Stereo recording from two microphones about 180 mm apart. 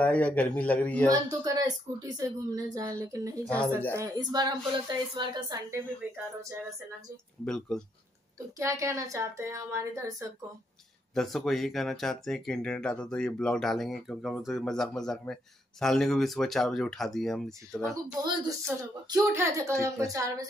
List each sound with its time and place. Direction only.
0.0 s a man's voice: 5° left (ahead or behind)
1.1 s speech: 20° right (ahead or behind)
3.4 s a man's voice: 5° left (ahead or behind)
3.9 s speech: 20° right (ahead or behind)
7.4 s speech: 5° left (ahead or behind)
8.5 s speech: 15° right (ahead or behind)
11.1 s speech: centre (ahead or behind)
18.0 s speech: 20° right (ahead or behind)